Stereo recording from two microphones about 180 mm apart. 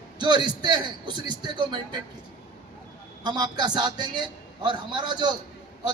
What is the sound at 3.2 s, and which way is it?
A man's voice, 25° right (ahead or behind).